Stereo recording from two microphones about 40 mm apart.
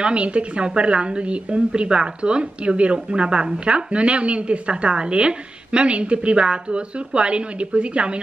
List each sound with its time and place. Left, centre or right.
0.0 s a woman's voice: right